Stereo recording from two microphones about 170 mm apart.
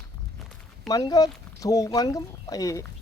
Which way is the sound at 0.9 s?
20° left (ahead or behind).